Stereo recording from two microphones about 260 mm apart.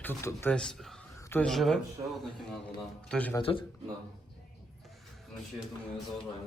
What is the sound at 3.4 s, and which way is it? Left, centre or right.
Speech, left.